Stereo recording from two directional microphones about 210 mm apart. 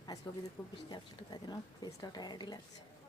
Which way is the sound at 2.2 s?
20° left (ahead or behind).